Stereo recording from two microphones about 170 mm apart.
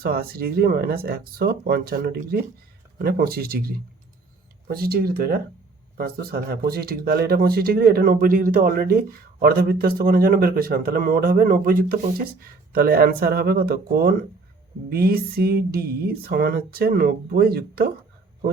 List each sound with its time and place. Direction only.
0.0 s speech: 65° right (ahead or behind)